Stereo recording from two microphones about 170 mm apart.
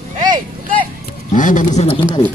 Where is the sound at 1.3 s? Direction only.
50° left (ahead or behind).